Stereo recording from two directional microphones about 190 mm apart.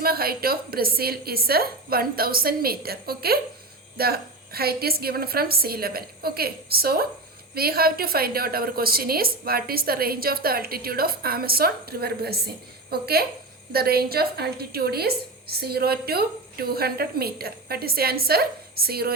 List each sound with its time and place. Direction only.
0.0 s a woman's voice: 55° right (ahead or behind)